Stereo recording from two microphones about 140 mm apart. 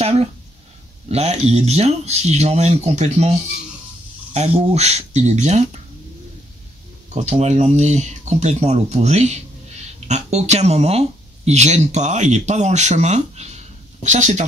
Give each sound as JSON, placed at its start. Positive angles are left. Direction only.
{"t": 1.1, "sound": "speech", "side_deg": -50}
{"t": 7.2, "sound": "speech", "side_deg": -55}